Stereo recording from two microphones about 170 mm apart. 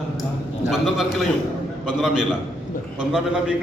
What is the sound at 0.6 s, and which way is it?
A man's voice, centre (ahead or behind).